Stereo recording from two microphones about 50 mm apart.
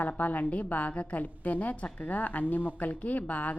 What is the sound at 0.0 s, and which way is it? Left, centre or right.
A woman's voice, left.